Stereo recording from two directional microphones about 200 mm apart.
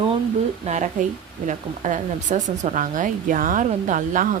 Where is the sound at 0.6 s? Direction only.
35° right (ahead or behind).